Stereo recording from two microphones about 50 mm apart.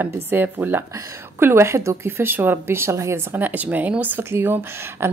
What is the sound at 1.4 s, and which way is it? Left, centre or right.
Speech, right.